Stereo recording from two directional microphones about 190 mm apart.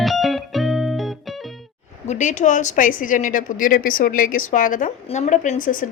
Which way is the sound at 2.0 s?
40° left (ahead or behind).